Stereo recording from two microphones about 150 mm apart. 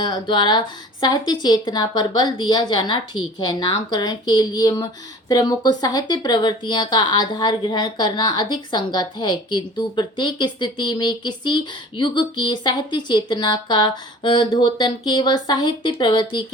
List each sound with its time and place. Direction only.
0.0 s speech: 30° left (ahead or behind)